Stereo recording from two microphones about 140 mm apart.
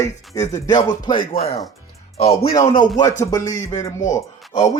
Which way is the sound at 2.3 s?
30° left (ahead or behind).